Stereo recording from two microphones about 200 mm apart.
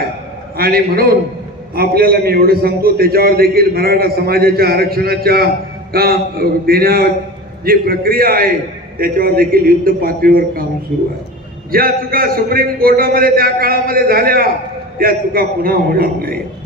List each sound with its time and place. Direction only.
0.5 s a man's voice: 50° right (ahead or behind)
11.7 s a man's voice: 45° right (ahead or behind)